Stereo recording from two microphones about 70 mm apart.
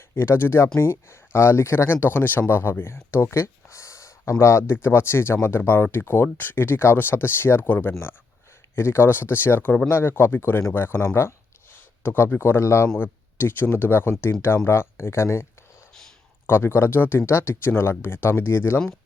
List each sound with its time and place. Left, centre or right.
0.2 s speech: left
13.0 s speech: left
16.5 s speech: left